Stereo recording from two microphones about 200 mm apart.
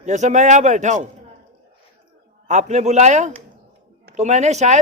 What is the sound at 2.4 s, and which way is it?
Speech, 35° right (ahead or behind).